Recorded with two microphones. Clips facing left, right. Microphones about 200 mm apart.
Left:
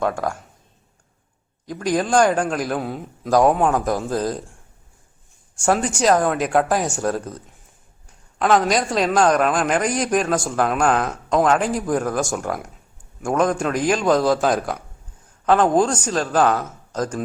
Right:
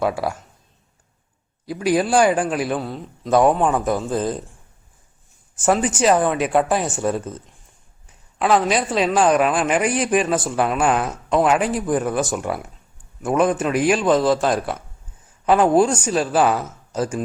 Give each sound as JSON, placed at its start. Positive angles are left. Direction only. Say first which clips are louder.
{"t": 0.0, "sound": "a man's voice", "louder": "right 1 dB", "side_deg": -5}
{"t": 1.6, "sound": "a man's voice", "louder": "right 2 dB", "side_deg": -10}
{"t": 2.7, "sound": "a man's voice", "louder": "even", "side_deg": 10}
{"t": 3.2, "sound": "a man's voice", "louder": "even", "side_deg": 0}
{"t": 5.5, "sound": "a man's voice", "louder": "right 1 dB", "side_deg": -5}